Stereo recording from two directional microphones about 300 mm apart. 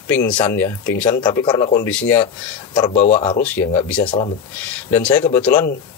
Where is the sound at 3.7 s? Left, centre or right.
Centre.